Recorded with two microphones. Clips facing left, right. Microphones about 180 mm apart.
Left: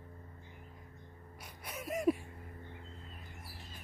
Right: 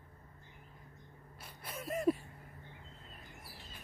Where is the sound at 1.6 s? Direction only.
10° left (ahead or behind).